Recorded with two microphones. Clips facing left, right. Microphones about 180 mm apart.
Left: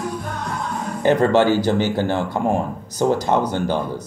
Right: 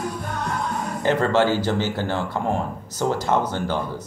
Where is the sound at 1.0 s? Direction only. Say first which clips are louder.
Left 4 dB; 15° left (ahead or behind).